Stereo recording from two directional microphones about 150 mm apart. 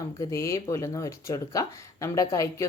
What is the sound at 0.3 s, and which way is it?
A woman's voice, 20° left (ahead or behind).